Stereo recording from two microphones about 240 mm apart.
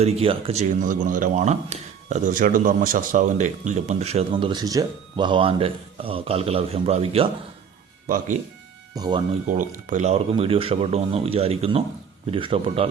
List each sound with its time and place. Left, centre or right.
0.0 s speech: right
8.0 s speech: right
9.0 s speech: centre
9.5 s speech: right